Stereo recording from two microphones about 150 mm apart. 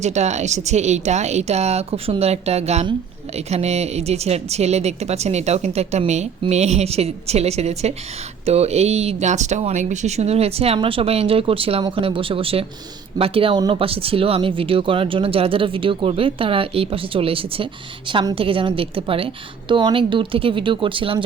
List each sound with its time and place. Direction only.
0.0 s speech: 50° right (ahead or behind)